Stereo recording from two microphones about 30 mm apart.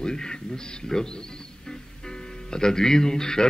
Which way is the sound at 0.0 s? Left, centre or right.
Left.